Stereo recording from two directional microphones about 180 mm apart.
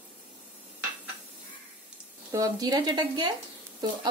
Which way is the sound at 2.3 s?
20° right (ahead or behind).